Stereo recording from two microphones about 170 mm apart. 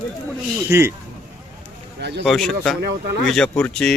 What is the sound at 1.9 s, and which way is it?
Speech, 85° right.